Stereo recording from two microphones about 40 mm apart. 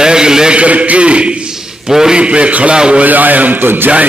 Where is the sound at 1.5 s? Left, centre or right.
Centre.